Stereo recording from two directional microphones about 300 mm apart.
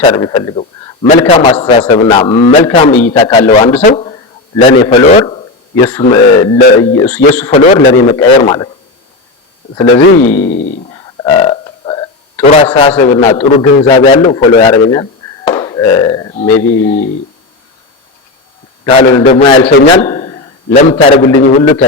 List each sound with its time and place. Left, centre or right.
0.0 s a man's voice: centre
7.5 s a man's voice: centre
9.7 s a man's voice: centre
10.5 s burping: centre
12.7 s a man's voice: centre
18.9 s a man's voice: centre